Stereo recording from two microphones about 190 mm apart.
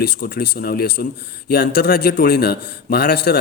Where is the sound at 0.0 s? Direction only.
55° left (ahead or behind).